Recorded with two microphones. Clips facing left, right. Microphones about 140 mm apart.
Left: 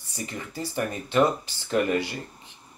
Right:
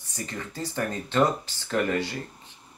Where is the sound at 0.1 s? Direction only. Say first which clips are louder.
Even; 15° left (ahead or behind).